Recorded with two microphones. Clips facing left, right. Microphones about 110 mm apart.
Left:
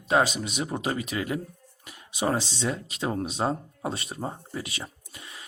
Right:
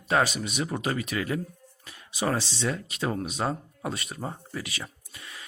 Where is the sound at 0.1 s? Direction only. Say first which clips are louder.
Left 1 dB; 20° left (ahead or behind).